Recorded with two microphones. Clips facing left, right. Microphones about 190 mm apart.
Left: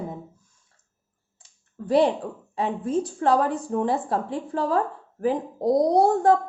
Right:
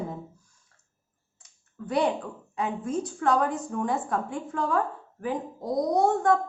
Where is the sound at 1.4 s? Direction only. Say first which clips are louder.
Left 3 dB; 30° left (ahead or behind).